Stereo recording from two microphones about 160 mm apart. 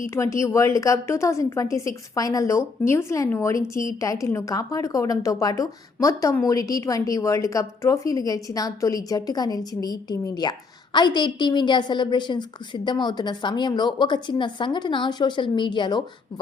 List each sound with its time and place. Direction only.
0.1 s a woman's voice: 15° left (ahead or behind)